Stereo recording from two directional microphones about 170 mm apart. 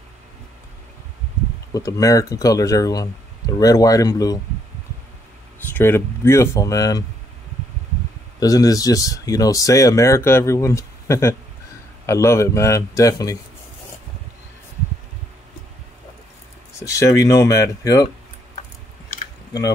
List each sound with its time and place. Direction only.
1.7 s speech: 20° left (ahead or behind)
5.7 s speech: 15° left (ahead or behind)
8.4 s speech: 20° left (ahead or behind)
16.8 s speech: 20° left (ahead or behind)